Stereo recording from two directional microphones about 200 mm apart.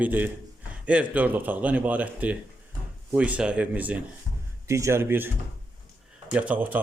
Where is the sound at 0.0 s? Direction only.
10° right (ahead or behind).